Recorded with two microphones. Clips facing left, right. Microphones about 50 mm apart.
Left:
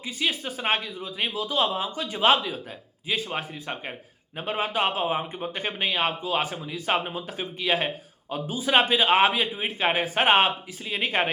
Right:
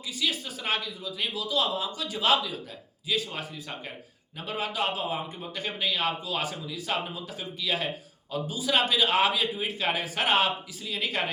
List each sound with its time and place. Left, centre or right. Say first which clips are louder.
0.0 s a man's voice: left 3 dB; left